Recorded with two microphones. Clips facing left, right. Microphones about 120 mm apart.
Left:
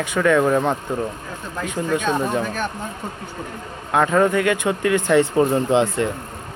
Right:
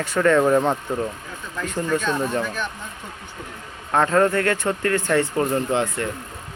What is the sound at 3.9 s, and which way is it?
Speech, 5° left (ahead or behind).